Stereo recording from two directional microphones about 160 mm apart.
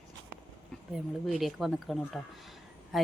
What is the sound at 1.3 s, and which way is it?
Speech, centre (ahead or behind).